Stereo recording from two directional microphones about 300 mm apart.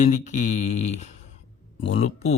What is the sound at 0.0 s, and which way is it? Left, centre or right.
Mantra, left.